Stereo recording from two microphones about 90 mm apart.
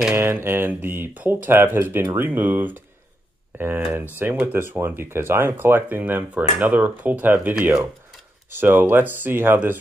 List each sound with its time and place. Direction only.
0.1 s speech: 25° right (ahead or behind)